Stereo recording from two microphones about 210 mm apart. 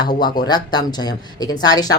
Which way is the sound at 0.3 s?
20° left (ahead or behind).